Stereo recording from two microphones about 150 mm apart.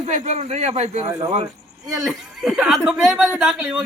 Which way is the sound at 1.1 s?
20° right (ahead or behind).